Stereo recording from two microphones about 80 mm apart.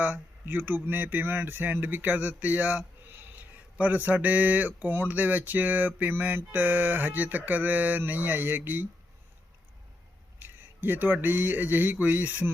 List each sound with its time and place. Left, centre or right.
0.0 s speech: right
10.4 s speech: right